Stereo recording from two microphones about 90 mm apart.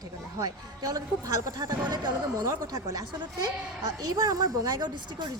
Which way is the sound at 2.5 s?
35° right (ahead or behind).